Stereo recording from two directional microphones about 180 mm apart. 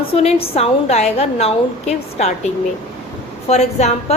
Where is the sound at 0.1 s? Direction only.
35° left (ahead or behind).